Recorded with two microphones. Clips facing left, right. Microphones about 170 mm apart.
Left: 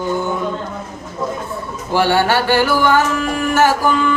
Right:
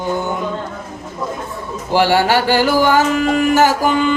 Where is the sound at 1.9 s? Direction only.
15° right (ahead or behind).